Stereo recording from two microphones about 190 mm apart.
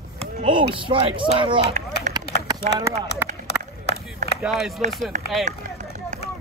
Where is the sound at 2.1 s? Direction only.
40° right (ahead or behind).